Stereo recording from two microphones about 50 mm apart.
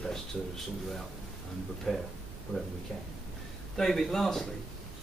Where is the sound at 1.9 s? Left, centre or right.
Centre.